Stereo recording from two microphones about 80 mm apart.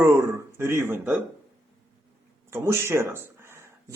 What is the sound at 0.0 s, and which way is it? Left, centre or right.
Speech, right.